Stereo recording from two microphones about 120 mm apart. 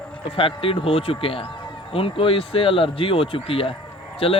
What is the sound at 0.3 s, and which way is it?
Speech, 50° left (ahead or behind).